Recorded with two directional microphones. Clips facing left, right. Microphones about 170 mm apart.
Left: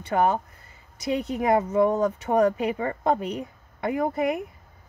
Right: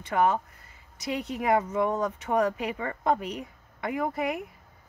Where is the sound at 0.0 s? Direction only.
35° left (ahead or behind).